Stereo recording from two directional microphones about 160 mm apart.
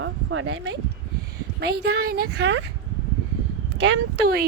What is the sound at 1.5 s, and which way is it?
Speech, 90° right.